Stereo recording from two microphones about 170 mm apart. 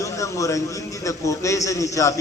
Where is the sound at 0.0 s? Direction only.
20° left (ahead or behind).